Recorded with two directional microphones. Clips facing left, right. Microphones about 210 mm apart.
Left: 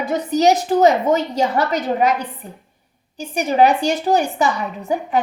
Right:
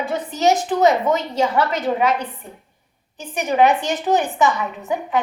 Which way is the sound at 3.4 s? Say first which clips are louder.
Left 2 dB; 35° left (ahead or behind).